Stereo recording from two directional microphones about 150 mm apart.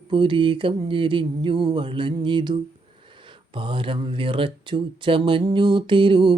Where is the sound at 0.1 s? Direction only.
35° right (ahead or behind).